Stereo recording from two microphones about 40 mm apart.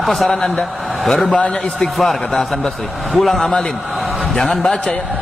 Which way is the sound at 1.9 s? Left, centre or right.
Centre.